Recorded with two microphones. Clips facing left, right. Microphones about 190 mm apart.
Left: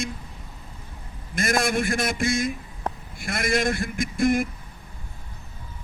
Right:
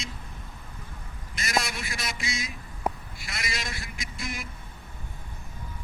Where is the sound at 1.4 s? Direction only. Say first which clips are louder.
Left 7 dB; 50° left (ahead or behind).